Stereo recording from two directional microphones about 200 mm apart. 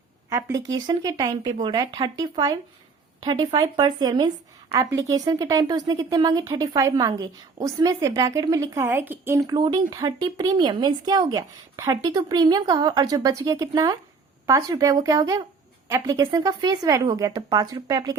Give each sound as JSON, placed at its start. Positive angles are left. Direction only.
{"t": 0.3, "sound": "a woman's voice", "side_deg": -15}